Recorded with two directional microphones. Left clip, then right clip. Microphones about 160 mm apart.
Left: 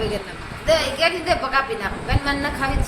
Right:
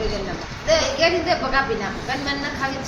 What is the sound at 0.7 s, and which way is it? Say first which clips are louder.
Speech: even; 90° left.